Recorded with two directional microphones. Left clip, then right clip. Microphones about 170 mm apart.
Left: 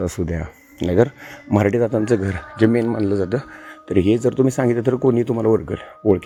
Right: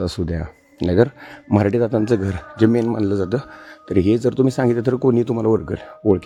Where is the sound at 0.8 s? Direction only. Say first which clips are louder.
Even; 35° right (ahead or behind).